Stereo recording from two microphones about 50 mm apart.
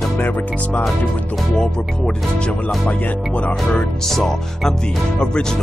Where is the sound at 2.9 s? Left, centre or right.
Left.